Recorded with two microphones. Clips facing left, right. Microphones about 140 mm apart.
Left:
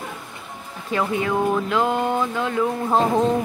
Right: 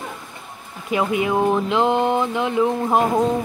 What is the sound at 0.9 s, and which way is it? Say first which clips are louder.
A woman's voice: right 2 dB; 15° right (ahead or behind).